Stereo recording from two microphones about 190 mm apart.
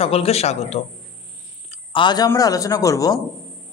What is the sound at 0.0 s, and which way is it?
A man's voice, 30° left (ahead or behind).